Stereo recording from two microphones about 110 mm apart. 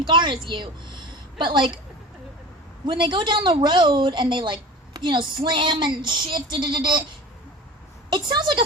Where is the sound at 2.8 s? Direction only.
45° right (ahead or behind).